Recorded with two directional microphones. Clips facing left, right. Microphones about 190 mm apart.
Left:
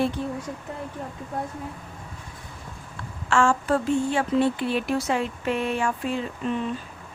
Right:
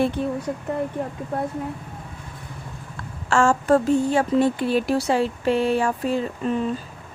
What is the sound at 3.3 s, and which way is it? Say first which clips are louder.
Speech: right 4 dB; 40° right (ahead or behind).